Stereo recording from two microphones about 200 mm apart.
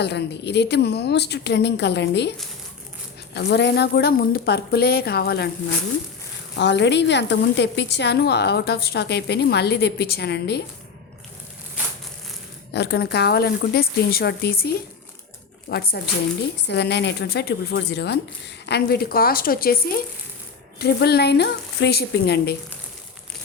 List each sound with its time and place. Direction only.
0.0 s a woman's voice: 55° left (ahead or behind)
3.3 s a woman's voice: 60° left (ahead or behind)
6.6 s a woman's voice: 60° left (ahead or behind)
12.7 s a woman's voice: 55° left (ahead or behind)